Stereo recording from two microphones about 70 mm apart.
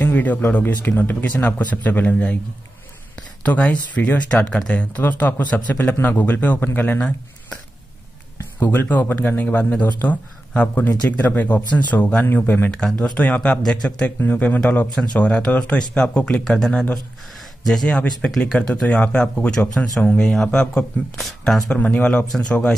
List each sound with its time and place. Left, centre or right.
0.0 s speech: left
3.4 s speech: centre
7.0 s speech: centre
8.5 s speech: left
19.6 s speech: left
20.2 s speech: centre
21.7 s speech: centre